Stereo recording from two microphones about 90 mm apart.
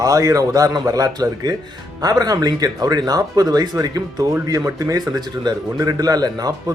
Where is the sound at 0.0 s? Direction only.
40° right (ahead or behind).